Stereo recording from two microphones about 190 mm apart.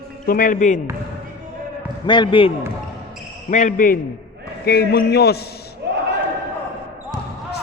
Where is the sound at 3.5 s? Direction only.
40° left (ahead or behind); by 5.4 s 55° left (ahead or behind).